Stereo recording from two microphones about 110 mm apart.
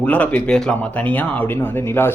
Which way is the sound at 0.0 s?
15° left (ahead or behind).